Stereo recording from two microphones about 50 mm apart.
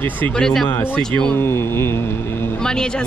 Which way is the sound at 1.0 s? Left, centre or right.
Centre.